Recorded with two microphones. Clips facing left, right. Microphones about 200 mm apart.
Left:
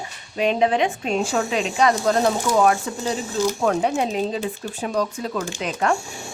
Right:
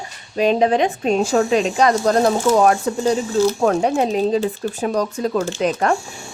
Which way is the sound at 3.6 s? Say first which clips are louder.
Right 4 dB; 40° right (ahead or behind).